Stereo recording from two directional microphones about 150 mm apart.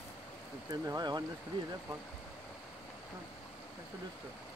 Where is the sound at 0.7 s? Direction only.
25° right (ahead or behind).